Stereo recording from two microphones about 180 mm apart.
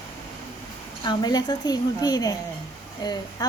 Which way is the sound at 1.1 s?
25° left (ahead or behind).